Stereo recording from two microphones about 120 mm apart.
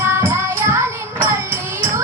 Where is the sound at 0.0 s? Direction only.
20° right (ahead or behind).